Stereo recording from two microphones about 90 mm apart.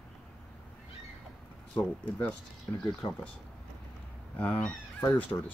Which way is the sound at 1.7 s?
15° left (ahead or behind).